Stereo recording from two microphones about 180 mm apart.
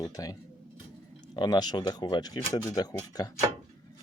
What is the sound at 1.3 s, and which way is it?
Speech, 25° left (ahead or behind).